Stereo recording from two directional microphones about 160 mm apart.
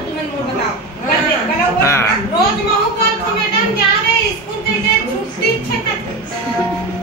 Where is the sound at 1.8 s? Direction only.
15° left (ahead or behind).